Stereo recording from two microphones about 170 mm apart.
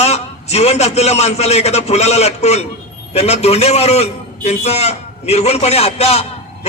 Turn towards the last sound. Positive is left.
turn(degrees=35)  # may be behind; listen again after turning